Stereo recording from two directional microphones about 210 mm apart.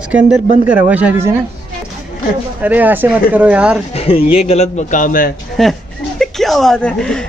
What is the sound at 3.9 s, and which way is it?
A man's voice, 25° left (ahead or behind).